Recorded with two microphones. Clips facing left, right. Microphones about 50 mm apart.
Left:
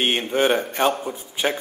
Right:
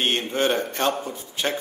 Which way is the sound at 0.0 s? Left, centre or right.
Centre.